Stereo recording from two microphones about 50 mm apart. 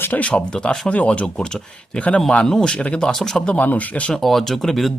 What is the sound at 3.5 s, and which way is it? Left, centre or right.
Speech, left.